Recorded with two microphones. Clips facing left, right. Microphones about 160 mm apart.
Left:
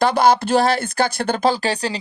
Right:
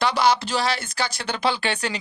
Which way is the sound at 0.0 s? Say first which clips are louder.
Left 5 dB; 50° left (ahead or behind).